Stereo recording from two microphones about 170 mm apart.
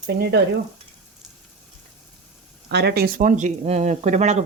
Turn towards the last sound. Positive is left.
turn(degrees=-45)  # may be behind; listen again after turning